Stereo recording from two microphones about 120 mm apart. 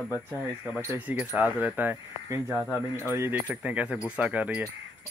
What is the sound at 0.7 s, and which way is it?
Speech, 15° right (ahead or behind).